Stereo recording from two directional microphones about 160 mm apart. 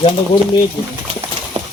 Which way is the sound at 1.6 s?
35° right (ahead or behind).